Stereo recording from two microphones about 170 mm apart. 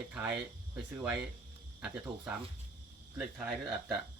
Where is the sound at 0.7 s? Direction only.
10° right (ahead or behind).